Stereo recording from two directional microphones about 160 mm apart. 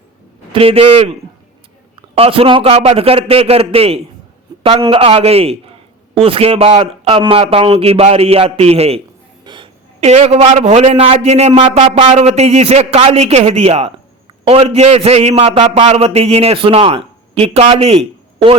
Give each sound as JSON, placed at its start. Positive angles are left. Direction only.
{"t": 0.5, "sound": "a man's voice", "side_deg": -35}
{"t": 9.4, "sound": "a sound", "side_deg": -30}
{"t": 10.1, "sound": "a man's voice", "side_deg": -40}